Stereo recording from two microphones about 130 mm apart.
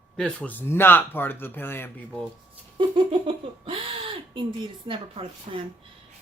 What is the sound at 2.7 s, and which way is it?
Speech, 40° right (ahead or behind).